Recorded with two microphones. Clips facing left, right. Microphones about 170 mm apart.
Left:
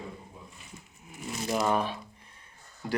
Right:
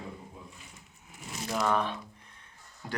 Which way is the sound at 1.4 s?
15° left (ahead or behind).